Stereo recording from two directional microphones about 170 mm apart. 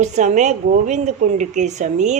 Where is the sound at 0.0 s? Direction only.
45° right (ahead or behind).